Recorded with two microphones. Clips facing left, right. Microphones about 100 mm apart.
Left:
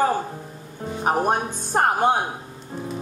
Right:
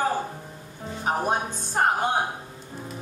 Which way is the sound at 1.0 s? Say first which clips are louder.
Left 4 dB; 55° left (ahead or behind).